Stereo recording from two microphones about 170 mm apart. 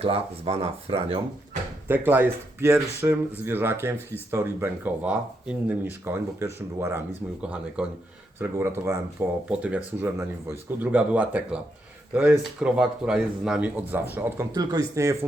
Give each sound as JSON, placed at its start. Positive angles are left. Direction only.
{"t": 0.0, "sound": "speech", "side_deg": -35}
{"t": 1.9, "sound": "speech", "side_deg": -10}